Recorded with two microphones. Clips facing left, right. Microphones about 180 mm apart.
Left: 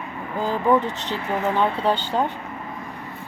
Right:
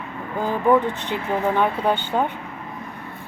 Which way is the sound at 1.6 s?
20° right (ahead or behind).